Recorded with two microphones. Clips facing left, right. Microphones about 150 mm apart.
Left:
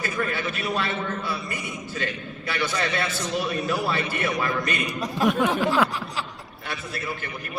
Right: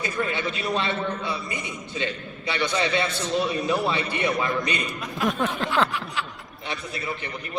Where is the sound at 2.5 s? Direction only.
20° right (ahead or behind).